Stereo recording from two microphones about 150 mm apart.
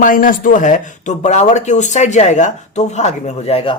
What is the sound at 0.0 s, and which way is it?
Speech, 65° left (ahead or behind).